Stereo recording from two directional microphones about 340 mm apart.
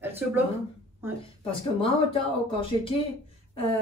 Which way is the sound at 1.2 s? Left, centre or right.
Centre.